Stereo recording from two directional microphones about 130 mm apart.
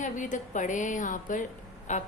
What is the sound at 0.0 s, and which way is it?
A woman's voice, 75° left (ahead or behind).